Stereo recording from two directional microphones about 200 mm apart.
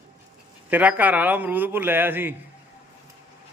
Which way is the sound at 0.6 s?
10° right (ahead or behind).